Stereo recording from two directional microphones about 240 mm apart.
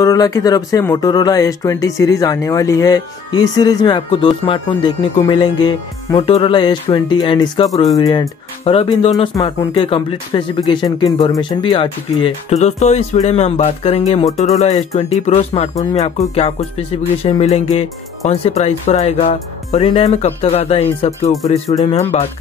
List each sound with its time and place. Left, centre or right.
0.0 s speech: centre
15.7 s speech: centre
16.3 s speech: left
21.5 s speech: centre